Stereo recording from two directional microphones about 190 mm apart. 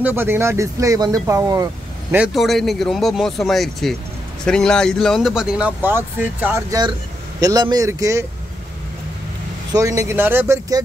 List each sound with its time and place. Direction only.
0.0 s speech: 10° right (ahead or behind)
2.1 s speech: centre (ahead or behind)
9.7 s speech: 15° right (ahead or behind)